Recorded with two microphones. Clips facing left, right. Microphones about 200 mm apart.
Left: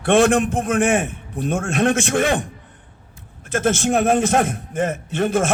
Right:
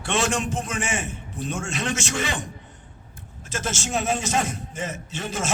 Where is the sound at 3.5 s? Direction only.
55° left (ahead or behind).